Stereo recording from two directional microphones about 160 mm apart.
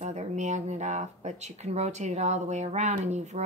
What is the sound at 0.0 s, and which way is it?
A woman's voice, 45° right (ahead or behind).